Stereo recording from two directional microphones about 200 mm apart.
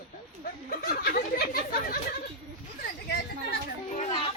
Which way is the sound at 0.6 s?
50° left (ahead or behind).